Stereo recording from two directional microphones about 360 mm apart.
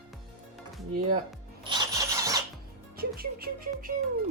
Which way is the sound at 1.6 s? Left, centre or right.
Centre.